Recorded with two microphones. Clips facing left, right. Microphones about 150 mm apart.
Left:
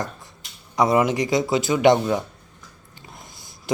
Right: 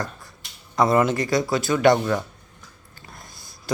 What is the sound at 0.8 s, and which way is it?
Speech, 15° left (ahead or behind).